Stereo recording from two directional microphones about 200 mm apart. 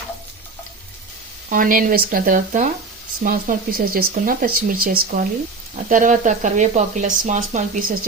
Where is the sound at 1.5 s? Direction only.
45° right (ahead or behind).